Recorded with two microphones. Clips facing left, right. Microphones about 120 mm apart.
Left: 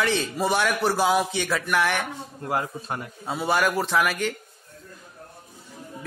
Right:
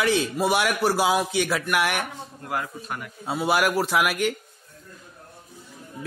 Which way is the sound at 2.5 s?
25° left (ahead or behind).